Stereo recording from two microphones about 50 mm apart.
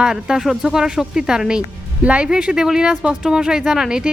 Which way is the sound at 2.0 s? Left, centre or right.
Right.